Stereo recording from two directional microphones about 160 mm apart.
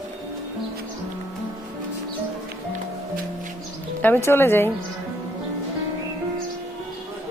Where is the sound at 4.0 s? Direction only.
10° left (ahead or behind).